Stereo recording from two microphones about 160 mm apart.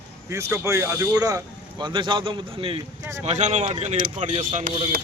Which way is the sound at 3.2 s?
45° right (ahead or behind).